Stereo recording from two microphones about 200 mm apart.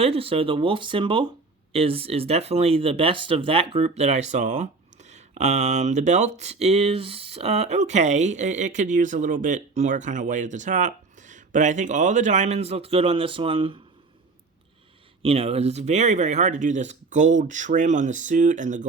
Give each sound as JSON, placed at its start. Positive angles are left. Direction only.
{"t": 0.0, "sound": "speech", "side_deg": -30}
{"t": 15.2, "sound": "speech", "side_deg": -30}